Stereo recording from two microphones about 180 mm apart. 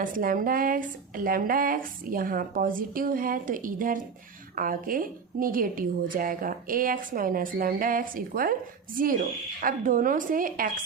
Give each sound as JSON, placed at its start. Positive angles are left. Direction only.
{"t": 0.0, "sound": "speech", "side_deg": -50}
{"t": 9.6, "sound": "speech", "side_deg": -50}